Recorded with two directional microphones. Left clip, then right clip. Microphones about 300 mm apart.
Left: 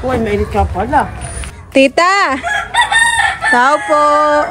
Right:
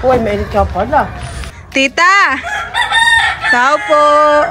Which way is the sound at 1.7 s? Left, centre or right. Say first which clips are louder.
Even; centre.